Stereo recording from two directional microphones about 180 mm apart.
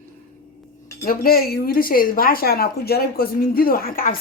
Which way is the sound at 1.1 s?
55° left (ahead or behind).